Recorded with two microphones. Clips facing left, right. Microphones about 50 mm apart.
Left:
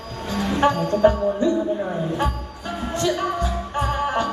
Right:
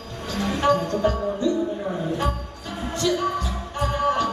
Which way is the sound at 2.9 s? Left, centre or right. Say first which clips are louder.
Even; left.